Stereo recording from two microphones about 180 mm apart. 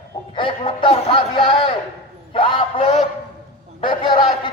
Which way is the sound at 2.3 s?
30° left (ahead or behind).